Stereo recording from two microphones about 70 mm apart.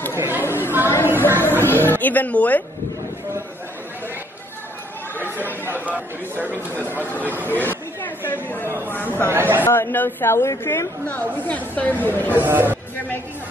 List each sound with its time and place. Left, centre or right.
0.4 s chatter: left
0.8 s a sound: left
1.4 s music: left
6.4 s speech: right
6.8 s speech: left
7.5 s chatter: left
8.8 s speech: left
9.3 s speech: right
9.7 s a woman's voice: left
11.1 s speech: left
12.3 s speech: right